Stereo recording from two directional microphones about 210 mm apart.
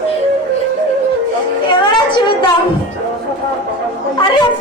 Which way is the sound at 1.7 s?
20° left (ahead or behind).